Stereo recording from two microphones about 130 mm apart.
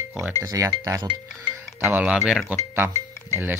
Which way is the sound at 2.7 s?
15° right (ahead or behind).